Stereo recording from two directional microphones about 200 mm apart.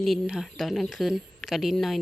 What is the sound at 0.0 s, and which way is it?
Speech, centre (ahead or behind).